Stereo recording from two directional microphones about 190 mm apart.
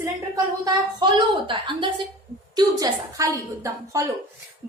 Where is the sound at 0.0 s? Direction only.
20° right (ahead or behind).